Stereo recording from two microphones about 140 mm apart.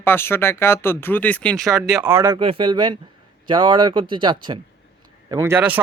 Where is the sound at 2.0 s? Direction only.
20° right (ahead or behind).